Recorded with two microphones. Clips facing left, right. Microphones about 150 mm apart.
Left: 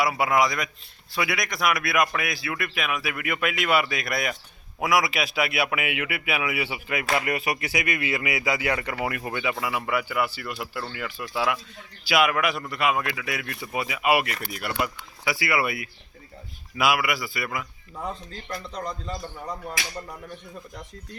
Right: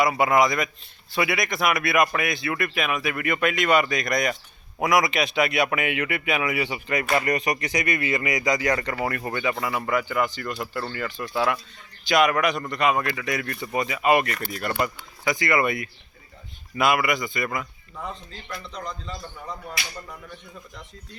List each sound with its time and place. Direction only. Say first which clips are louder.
0.0 s speech: right 3 dB; centre (ahead or behind)
18.3 s speech: left 2 dB; 40° left (ahead or behind)